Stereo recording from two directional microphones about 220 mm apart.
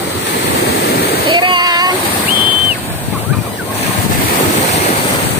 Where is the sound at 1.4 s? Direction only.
20° right (ahead or behind).